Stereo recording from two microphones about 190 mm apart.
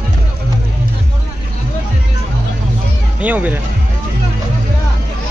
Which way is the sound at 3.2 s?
10° right (ahead or behind).